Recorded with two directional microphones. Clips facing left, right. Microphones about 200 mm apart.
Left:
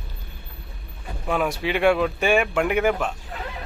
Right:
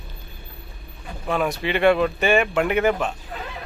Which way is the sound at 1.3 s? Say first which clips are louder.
Even; 5° left (ahead or behind).